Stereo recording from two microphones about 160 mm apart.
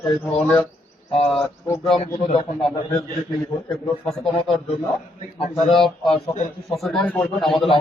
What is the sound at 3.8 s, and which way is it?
Speech, centre (ahead or behind).